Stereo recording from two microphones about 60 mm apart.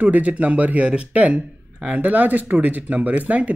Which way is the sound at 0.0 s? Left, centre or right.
Right.